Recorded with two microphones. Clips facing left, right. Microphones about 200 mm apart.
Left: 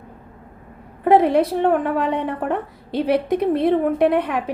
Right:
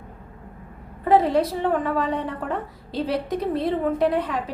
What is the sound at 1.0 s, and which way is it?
A woman's voice, 60° left (ahead or behind).